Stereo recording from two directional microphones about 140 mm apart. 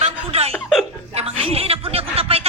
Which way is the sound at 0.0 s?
45° right (ahead or behind).